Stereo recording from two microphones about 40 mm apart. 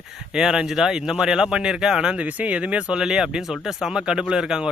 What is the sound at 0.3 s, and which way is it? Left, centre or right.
Speech, centre.